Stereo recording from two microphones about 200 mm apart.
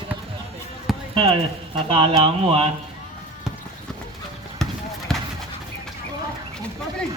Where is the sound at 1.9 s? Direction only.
30° right (ahead or behind).